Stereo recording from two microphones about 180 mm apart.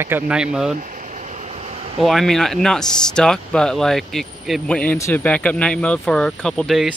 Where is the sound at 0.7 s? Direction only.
40° right (ahead or behind).